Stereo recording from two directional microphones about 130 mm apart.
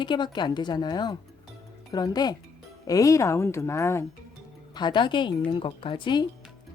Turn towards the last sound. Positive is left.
turn(degrees=40)  # may be behind; listen again after turning